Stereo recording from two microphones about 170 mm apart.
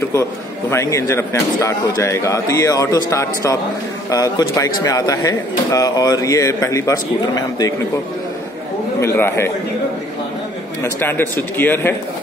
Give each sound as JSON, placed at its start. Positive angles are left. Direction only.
{"t": 0.1, "sound": "a man's voice", "side_deg": 15}
{"t": 9.0, "sound": "a man's voice", "side_deg": 15}
{"t": 10.8, "sound": "a man's voice", "side_deg": 15}